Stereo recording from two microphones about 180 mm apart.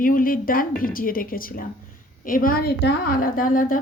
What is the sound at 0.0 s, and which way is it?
A woman's voice, 50° left (ahead or behind).